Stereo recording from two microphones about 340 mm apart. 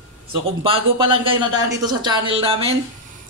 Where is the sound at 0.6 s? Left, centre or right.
Centre.